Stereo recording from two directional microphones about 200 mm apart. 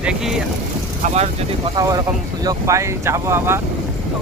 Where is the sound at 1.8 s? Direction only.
20° right (ahead or behind).